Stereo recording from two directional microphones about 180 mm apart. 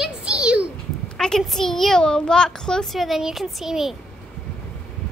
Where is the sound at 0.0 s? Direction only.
5° right (ahead or behind).